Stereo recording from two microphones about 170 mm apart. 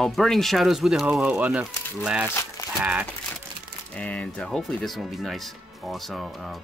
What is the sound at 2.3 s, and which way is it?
Speech, 15° left (ahead or behind).